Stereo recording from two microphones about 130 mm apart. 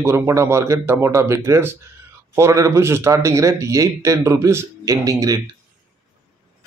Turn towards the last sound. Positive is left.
turn(degrees=-25)  # may be behind; listen again after turning